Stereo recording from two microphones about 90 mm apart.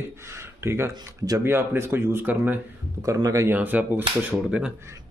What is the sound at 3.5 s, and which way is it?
Speech, 20° right (ahead or behind).